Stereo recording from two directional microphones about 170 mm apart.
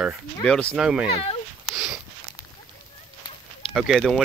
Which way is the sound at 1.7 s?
5° right (ahead or behind).